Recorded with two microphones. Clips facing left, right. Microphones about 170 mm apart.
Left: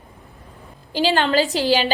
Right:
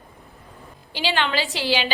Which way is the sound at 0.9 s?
40° left (ahead or behind).